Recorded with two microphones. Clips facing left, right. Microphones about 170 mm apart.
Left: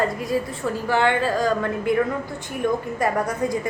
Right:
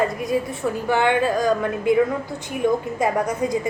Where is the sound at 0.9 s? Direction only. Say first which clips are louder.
Right 1 dB; 15° right (ahead or behind).